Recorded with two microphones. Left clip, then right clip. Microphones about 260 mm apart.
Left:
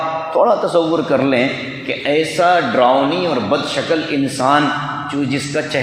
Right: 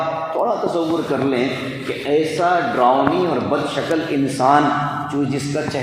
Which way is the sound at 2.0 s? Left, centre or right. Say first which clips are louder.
Left 3 dB; left.